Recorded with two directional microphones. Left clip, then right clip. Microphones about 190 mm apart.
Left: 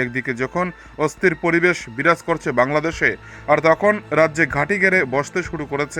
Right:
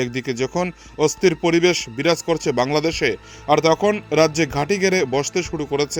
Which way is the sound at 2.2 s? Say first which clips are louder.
Left 1 dB; 25° right (ahead or behind).